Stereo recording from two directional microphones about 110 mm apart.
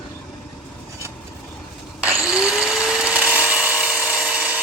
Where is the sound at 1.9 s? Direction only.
10° right (ahead or behind).